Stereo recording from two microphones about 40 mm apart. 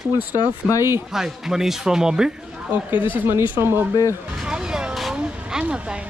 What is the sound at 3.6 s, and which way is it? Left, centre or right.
Speech, right.